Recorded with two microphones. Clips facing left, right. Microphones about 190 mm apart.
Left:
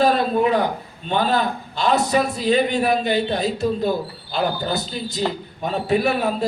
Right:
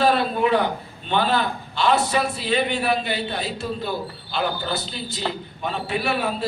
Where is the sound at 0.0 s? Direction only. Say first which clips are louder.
Left 2 dB; 40° left (ahead or behind).